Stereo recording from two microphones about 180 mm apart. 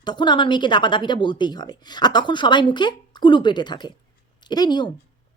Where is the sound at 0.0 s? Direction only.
25° left (ahead or behind).